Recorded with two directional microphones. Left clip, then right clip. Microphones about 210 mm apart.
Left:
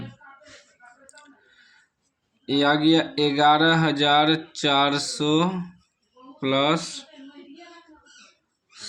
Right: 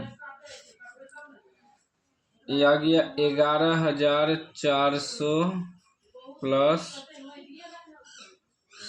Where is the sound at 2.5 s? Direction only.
30° left (ahead or behind).